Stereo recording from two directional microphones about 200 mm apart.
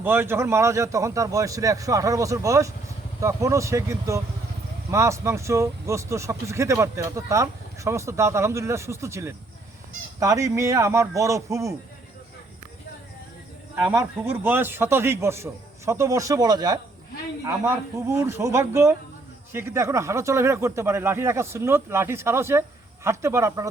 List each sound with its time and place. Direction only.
0.0 s speech: 10° right (ahead or behind)
13.7 s speech: 10° right (ahead or behind)